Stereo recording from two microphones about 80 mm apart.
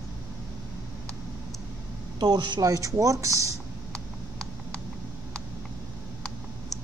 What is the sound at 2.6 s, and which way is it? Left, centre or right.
Speech, right.